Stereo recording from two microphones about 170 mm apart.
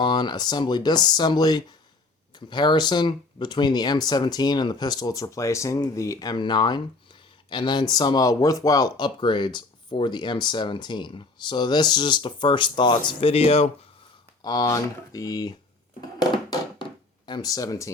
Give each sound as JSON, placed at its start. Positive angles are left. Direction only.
{"t": 0.0, "sound": "speech", "side_deg": 25}
{"t": 14.4, "sound": "speech", "side_deg": 25}
{"t": 16.1, "sound": "a sound", "side_deg": 25}
{"t": 17.2, "sound": "speech", "side_deg": 25}